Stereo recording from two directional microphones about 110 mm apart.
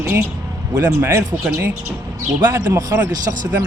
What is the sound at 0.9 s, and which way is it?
Speech, 25° right (ahead or behind).